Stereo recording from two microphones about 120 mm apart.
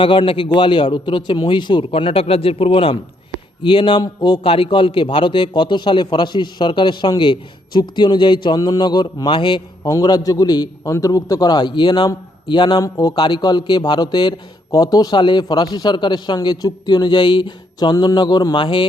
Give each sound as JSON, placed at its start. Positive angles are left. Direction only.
{"t": 0.0, "sound": "a man's voice", "side_deg": 45}
{"t": 9.9, "sound": "a man's voice", "side_deg": 30}
{"t": 12.8, "sound": "speech", "side_deg": 30}
{"t": 13.1, "sound": "a man's voice", "side_deg": 40}